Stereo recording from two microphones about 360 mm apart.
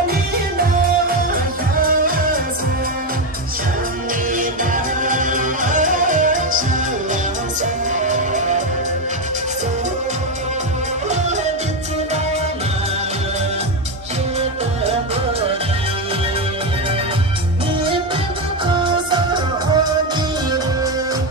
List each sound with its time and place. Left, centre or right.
5.0 s music: right
18.7 s music: centre